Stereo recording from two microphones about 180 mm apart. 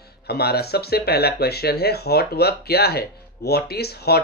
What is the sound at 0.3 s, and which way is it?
Speech, 60° left (ahead or behind).